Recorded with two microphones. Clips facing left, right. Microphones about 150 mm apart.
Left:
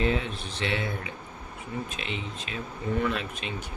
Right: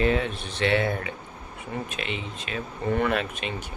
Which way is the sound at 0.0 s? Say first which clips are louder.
Right 4 dB; 60° right (ahead or behind).